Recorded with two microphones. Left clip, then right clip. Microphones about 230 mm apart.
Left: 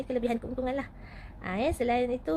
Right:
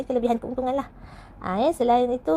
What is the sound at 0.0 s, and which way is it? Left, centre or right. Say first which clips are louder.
A woman's voice: right 7 dB; centre.